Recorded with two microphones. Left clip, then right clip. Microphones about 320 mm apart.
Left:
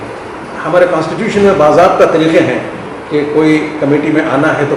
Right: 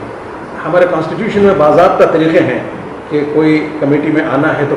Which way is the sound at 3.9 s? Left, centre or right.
Centre.